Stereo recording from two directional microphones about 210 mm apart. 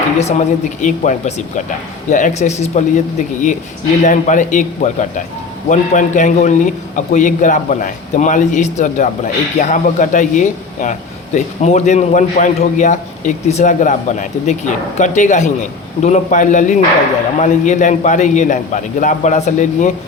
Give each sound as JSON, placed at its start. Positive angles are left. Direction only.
{"t": 0.2, "sound": "a man's voice", "side_deg": 35}
{"t": 4.0, "sound": "a man's voice", "side_deg": 35}